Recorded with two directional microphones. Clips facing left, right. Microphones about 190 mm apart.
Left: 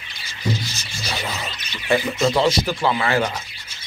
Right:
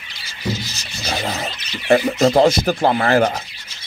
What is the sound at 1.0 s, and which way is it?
Speech, 40° right (ahead or behind).